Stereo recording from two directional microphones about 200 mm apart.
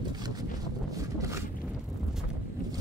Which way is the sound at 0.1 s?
20° right (ahead or behind).